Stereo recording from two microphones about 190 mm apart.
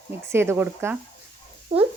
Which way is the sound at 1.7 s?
30° right (ahead or behind).